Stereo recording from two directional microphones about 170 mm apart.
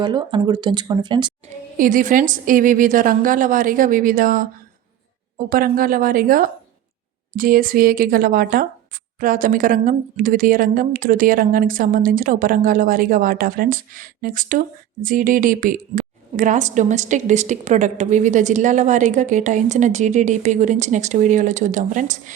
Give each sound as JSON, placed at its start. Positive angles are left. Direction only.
{"t": 0.0, "sound": "speech", "side_deg": -25}
{"t": 1.8, "sound": "a woman's voice", "side_deg": -50}